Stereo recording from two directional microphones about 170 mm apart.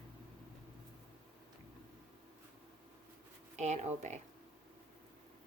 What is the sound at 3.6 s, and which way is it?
Speech, 45° right (ahead or behind).